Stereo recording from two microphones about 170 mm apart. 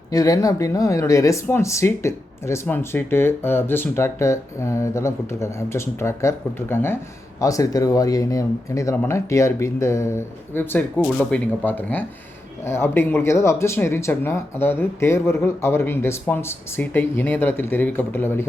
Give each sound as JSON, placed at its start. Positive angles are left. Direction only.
{"t": 0.1, "sound": "speech", "side_deg": 20}